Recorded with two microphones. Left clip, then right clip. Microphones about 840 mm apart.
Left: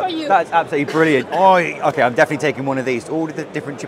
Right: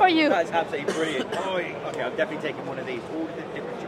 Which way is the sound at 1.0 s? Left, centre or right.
Left.